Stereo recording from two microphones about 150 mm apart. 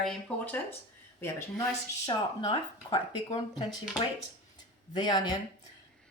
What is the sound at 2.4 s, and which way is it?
Speech, 35° left (ahead or behind).